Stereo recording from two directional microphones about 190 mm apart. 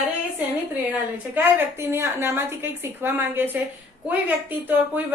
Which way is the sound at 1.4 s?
10° right (ahead or behind).